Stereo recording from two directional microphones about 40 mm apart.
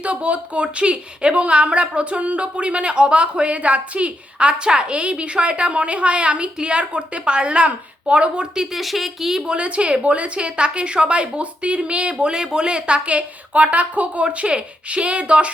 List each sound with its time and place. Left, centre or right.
0.0 s speech: right
8.8 s speech: centre
9.4 s speech: right